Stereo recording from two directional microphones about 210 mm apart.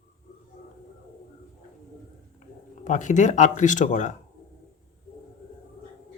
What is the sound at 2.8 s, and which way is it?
Speech, 35° left (ahead or behind).